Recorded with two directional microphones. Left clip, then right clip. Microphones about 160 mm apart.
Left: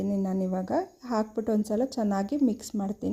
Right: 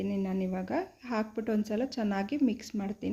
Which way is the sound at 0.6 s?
40° left (ahead or behind).